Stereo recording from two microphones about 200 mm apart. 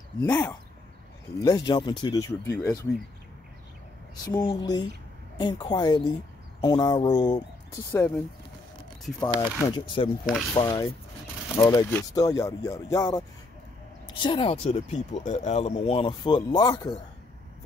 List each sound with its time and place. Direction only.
0.2 s speech: 15° left (ahead or behind)
4.4 s speech: 20° left (ahead or behind)
9.4 s speech: 20° left (ahead or behind)
14.2 s speech: 25° left (ahead or behind)